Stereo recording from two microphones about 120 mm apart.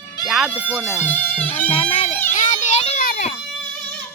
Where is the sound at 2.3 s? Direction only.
90° left; by 3.3 s 65° left (ahead or behind).